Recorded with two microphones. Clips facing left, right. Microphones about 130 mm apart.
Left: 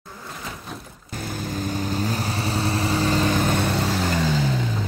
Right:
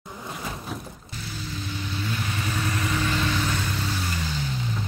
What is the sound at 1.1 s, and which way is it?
Vehicle, 50° left (ahead or behind).